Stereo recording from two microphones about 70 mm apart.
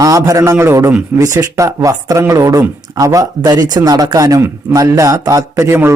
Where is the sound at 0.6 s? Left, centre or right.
Right.